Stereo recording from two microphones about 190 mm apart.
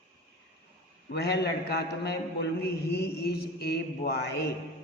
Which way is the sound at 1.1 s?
60° left (ahead or behind).